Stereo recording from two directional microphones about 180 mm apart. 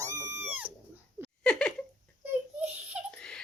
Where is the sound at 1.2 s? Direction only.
5° left (ahead or behind).